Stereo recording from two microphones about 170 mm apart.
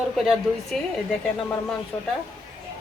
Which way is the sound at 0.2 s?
Centre (ahead or behind).